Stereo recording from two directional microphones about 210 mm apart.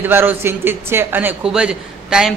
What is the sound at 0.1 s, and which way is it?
A man's voice, 10° right (ahead or behind).